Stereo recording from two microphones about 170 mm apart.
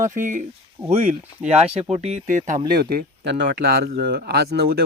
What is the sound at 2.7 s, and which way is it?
Speech, 60° right (ahead or behind).